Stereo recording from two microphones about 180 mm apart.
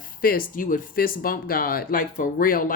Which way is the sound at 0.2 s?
50° left (ahead or behind).